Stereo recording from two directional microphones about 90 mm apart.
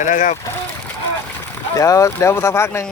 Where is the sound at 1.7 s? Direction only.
35° left (ahead or behind).